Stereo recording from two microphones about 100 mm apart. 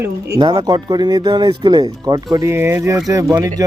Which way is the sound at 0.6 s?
45° right (ahead or behind).